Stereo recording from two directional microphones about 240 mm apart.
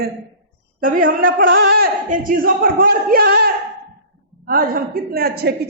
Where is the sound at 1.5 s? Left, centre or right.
Right.